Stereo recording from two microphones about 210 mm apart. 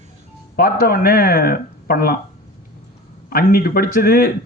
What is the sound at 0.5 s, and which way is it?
Speech, 45° left (ahead or behind).